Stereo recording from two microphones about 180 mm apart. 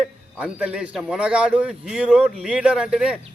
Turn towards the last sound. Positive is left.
turn(degrees=-5)  # may be behind; listen again after turning